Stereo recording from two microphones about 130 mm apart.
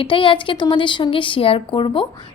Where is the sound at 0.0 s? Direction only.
40° left (ahead or behind).